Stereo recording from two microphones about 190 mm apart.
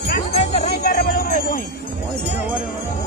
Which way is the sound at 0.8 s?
50° left (ahead or behind).